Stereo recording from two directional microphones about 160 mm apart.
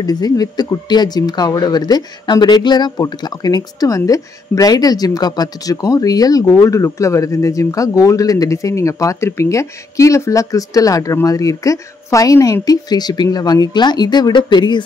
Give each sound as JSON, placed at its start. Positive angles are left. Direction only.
{"t": 0.0, "sound": "speech", "side_deg": 25}